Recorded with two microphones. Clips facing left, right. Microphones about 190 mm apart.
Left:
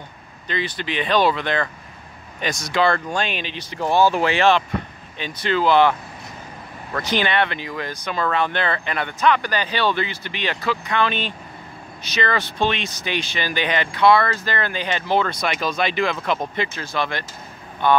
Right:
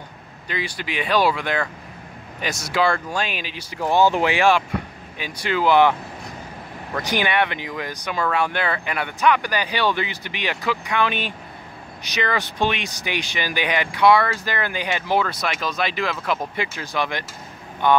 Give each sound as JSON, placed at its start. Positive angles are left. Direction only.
{"t": 0.5, "sound": "speech", "side_deg": -10}